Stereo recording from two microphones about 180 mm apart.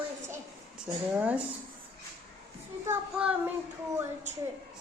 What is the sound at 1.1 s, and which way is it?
Speech, 10° right (ahead or behind).